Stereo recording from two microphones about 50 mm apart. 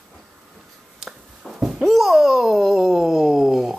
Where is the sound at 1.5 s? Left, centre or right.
Centre.